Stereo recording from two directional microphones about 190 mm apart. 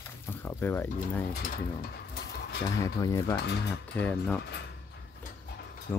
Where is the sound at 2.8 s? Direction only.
15° left (ahead or behind).